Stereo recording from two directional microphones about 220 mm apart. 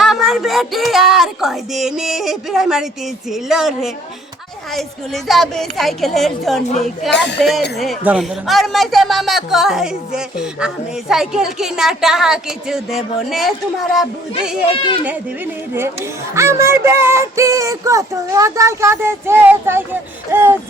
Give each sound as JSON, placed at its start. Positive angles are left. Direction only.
{"t": 0.0, "sound": "speech", "side_deg": 0}
{"t": 5.1, "sound": "speech", "side_deg": 0}
{"t": 7.1, "sound": "speech", "side_deg": 50}
{"t": 7.8, "sound": "speech", "side_deg": -5}
{"t": 15.7, "sound": "speech", "side_deg": -10}